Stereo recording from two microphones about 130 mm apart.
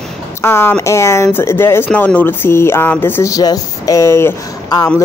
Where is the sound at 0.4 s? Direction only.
20° left (ahead or behind).